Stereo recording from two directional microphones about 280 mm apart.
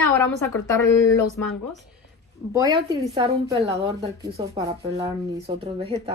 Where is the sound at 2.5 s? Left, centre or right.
Centre.